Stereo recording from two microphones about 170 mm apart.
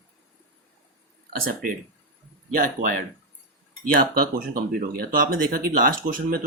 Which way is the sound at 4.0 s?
55° right (ahead or behind).